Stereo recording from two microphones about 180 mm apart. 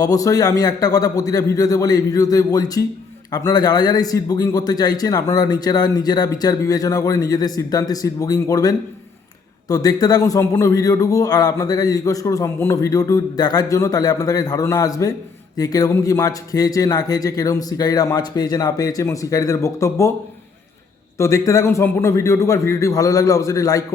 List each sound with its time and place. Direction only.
0.0 s a man's voice: 20° left (ahead or behind)
21.2 s a man's voice: 15° left (ahead or behind)